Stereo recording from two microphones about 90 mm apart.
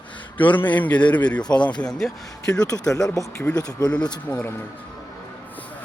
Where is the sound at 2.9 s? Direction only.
40° left (ahead or behind).